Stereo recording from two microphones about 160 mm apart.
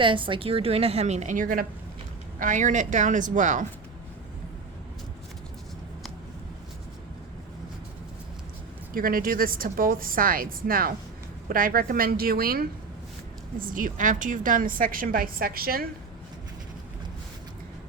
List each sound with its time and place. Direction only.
0.0 s a woman's voice: 30° right (ahead or behind); by 3.7 s 50° right (ahead or behind)
8.9 s a woman's voice: 65° right (ahead or behind)